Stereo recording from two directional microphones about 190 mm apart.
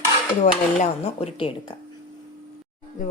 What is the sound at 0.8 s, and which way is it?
Speech, 30° left (ahead or behind).